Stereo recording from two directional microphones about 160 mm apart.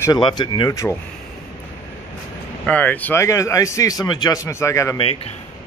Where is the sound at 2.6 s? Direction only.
10° left (ahead or behind).